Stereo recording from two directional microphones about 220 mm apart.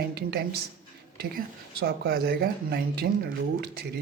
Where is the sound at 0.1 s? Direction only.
45° right (ahead or behind).